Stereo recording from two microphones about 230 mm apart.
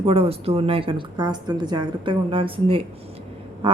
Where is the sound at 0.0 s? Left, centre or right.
Right.